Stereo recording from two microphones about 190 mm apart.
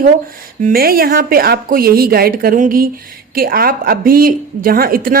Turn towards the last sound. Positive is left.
turn(degrees=-50)  # may be behind; listen again after turning